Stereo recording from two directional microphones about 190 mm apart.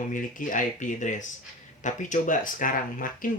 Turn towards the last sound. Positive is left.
turn(degrees=45)  # may be behind; listen again after turning